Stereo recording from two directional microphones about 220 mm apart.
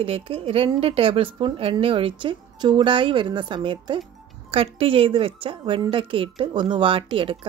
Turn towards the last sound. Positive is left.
turn(degrees=-25)  # may be behind; listen again after turning